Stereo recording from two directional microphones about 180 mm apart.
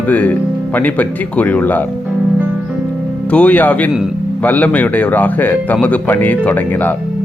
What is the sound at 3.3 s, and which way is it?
Speech, 10° left (ahead or behind).